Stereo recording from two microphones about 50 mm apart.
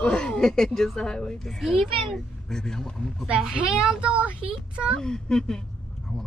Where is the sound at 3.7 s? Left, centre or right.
Centre.